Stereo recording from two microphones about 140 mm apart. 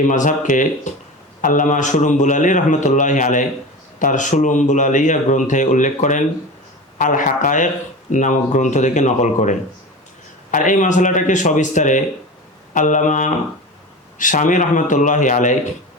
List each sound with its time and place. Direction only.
0.0 s speech: 65° left (ahead or behind)